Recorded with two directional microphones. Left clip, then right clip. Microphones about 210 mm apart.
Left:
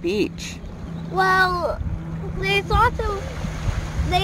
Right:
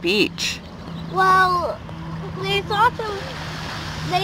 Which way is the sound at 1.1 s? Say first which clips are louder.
Right 2 dB; 20° left (ahead or behind).